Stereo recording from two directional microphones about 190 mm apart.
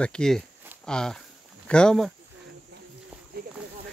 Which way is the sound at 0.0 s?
5° left (ahead or behind).